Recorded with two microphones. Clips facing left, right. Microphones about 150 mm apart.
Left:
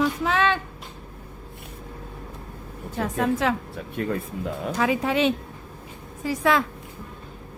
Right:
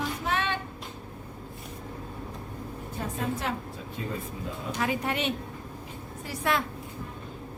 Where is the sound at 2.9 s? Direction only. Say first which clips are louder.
Left 8 dB; 90° left.